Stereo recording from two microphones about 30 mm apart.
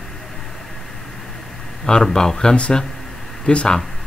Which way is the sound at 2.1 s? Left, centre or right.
Left.